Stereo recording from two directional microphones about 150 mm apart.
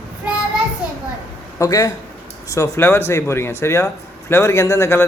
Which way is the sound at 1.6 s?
25° left (ahead or behind).